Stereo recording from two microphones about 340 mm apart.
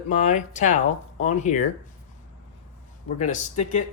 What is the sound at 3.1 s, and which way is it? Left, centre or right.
Speech, left.